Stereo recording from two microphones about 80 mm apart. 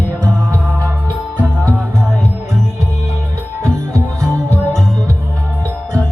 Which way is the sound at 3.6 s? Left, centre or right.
Right.